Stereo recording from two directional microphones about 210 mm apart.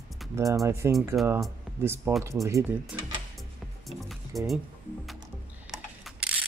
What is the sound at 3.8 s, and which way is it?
Music, centre (ahead or behind).